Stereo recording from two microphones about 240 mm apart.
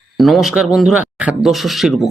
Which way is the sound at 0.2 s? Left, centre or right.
Centre.